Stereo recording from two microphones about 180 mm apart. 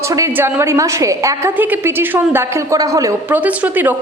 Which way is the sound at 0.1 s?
15° right (ahead or behind).